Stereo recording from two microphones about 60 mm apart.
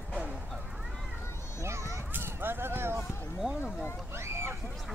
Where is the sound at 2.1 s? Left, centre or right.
Right.